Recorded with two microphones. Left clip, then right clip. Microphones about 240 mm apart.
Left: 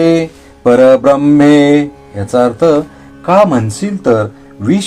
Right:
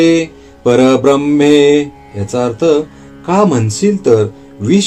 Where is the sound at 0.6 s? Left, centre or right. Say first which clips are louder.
Left 3 dB; left.